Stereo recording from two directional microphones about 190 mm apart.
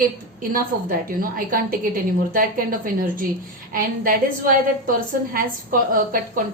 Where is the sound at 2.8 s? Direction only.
50° right (ahead or behind).